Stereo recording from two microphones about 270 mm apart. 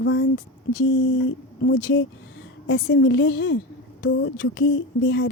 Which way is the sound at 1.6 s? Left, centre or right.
Left.